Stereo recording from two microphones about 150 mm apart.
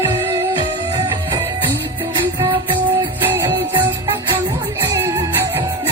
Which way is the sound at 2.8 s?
15° right (ahead or behind).